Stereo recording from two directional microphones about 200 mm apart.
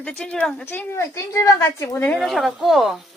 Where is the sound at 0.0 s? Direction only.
5° left (ahead or behind).